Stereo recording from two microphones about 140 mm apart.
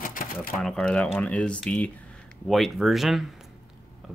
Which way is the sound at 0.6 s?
5° left (ahead or behind).